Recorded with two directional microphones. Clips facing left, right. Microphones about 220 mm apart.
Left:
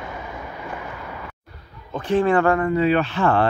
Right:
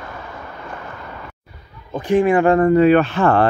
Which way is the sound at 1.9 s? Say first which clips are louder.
Right 3 dB; 10° right (ahead or behind).